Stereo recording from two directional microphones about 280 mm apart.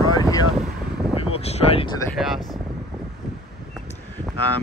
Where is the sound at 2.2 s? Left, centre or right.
Centre.